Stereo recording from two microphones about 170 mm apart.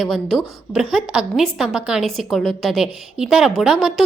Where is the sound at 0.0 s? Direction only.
Centre (ahead or behind).